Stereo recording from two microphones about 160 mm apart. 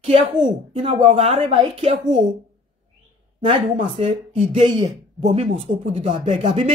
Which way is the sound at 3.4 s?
35° right (ahead or behind).